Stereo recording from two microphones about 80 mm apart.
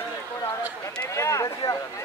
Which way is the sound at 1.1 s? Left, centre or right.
Left.